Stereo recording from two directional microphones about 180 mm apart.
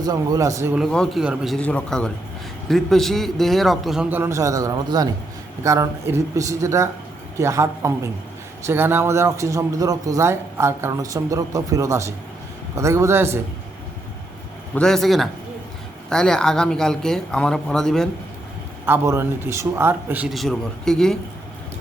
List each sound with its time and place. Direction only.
0.0 s a man's voice: 20° right (ahead or behind)
0.8 s a man's voice: 5° left (ahead or behind); by 13.4 s 15° right (ahead or behind)
14.8 s a man's voice: 5° left (ahead or behind)
18.9 s a man's voice: 15° right (ahead or behind)
20.3 s a man's voice: centre (ahead or behind)